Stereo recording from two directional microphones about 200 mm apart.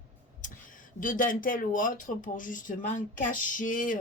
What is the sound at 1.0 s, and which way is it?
Speech, 40° left (ahead or behind).